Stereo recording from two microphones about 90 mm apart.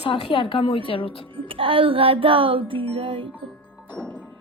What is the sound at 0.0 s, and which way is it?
Speech, 85° left.